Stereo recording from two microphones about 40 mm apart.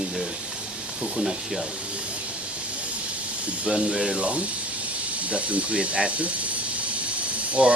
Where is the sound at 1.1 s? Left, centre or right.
Centre.